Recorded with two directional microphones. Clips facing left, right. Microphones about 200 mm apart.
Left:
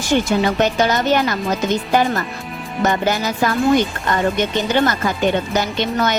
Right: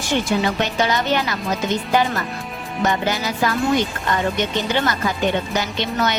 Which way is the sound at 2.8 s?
50° left (ahead or behind).